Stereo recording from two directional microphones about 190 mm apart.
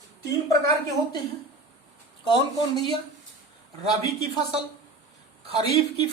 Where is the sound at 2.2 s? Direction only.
25° left (ahead or behind).